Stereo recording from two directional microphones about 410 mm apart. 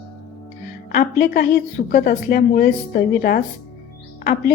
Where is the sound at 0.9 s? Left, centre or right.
Left.